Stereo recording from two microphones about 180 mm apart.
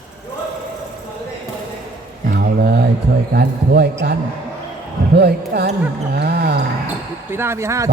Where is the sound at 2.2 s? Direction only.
60° right (ahead or behind).